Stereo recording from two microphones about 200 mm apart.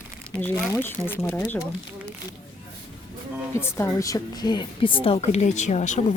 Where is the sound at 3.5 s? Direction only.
15° left (ahead or behind).